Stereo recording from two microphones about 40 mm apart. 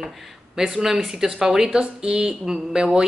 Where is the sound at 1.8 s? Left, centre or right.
Centre.